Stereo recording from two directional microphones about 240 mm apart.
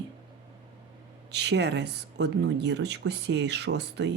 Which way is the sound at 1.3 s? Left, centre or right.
Right.